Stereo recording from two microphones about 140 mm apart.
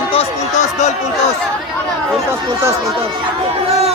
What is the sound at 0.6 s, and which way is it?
Speech, 55° left (ahead or behind).